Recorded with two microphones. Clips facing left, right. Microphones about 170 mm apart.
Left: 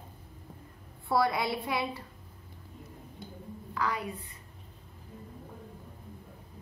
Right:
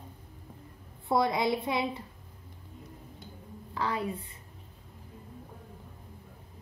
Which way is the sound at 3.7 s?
25° right (ahead or behind).